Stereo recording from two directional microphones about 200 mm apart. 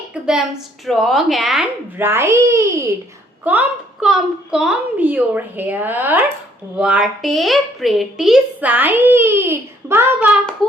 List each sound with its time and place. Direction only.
0.1 s a woman's voice: 5° right (ahead or behind)